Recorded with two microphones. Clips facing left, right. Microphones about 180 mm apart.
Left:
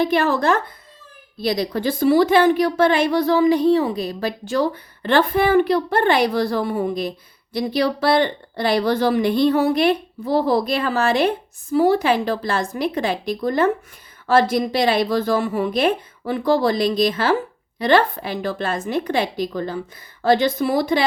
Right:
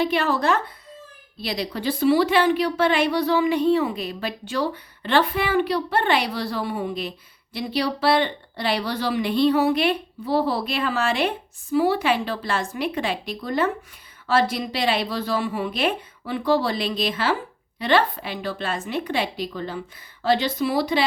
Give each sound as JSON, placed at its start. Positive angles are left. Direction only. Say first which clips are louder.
{"t": 0.0, "sound": "speech", "louder": "left 3 dB", "side_deg": 45}